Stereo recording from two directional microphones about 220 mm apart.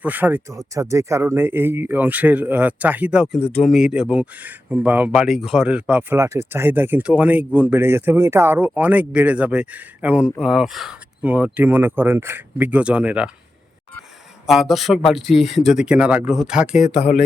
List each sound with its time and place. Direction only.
0.0 s speech: 5° right (ahead or behind)
14.4 s speech: centre (ahead or behind)
16.9 s speech: 30° left (ahead or behind)